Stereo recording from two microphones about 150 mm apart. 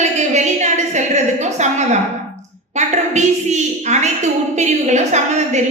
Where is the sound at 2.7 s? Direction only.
50° right (ahead or behind).